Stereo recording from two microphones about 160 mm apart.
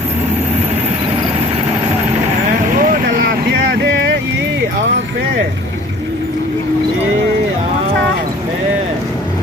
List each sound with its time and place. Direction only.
2.7 s vehicle: 65° right (ahead or behind); by 4.1 s 85° right